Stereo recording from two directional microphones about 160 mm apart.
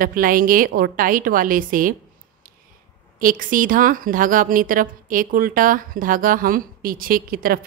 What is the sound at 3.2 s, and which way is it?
A woman's voice, 60° right (ahead or behind).